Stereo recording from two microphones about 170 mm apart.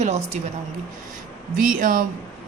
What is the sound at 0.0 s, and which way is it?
Speech, 40° right (ahead or behind).